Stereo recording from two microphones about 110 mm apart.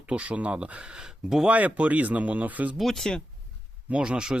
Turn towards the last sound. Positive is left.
turn(degrees=-5)  # may be behind; listen again after turning